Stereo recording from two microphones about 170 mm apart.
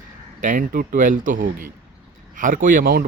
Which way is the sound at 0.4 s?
55° right (ahead or behind).